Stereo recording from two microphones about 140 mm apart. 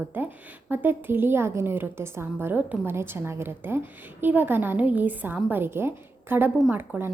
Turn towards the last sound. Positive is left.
turn(degrees=-15)  # may be behind; listen again after turning